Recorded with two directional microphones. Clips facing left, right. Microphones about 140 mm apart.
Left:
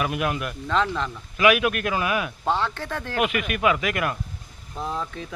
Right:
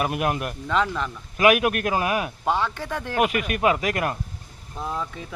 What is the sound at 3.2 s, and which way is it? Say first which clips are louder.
Speech: right 2 dB; 35° right (ahead or behind).